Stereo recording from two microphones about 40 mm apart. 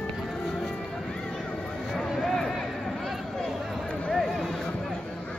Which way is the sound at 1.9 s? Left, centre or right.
Centre.